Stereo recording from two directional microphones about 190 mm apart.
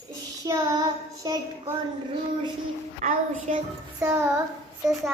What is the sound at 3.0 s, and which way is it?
Speech, 40° right (ahead or behind).